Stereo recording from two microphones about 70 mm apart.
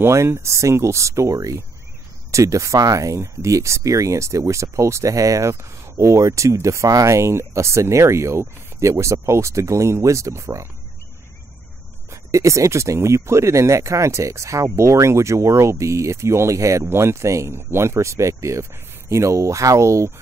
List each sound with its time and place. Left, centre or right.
0.0 s speech: right
12.1 s speech: right